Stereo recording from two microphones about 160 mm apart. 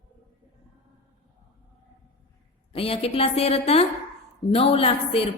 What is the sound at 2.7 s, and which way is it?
A woman's voice, 35° left (ahead or behind).